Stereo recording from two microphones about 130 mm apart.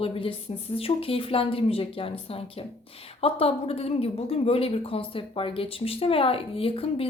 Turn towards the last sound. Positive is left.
turn(degrees=45)  # may be behind; listen again after turning